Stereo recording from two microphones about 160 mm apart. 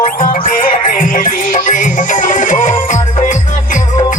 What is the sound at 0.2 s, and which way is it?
Music, 55° left (ahead or behind).